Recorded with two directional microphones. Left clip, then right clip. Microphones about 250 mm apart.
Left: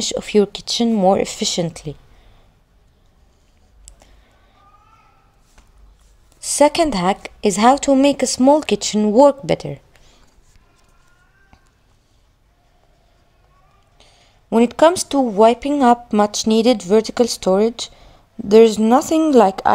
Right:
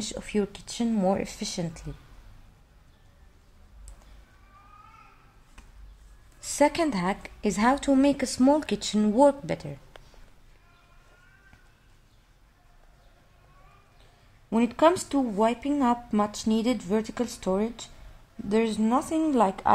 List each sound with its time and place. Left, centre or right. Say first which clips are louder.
0.0 s speech: left 14 dB; left
6.4 s a woman's voice: left 9 dB; left
14.5 s speech: left 9 dB; left